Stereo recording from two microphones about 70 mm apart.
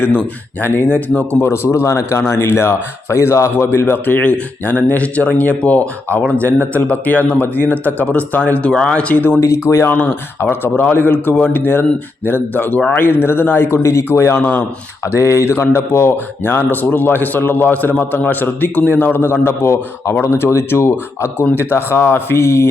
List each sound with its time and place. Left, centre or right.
0.9 s speech: left
1.5 s speech: left
9.4 s speech: left
15.0 s a sound: left
15.7 s speech: left